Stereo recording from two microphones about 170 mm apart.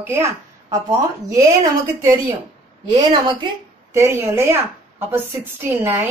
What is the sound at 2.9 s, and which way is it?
Speech, 25° right (ahead or behind).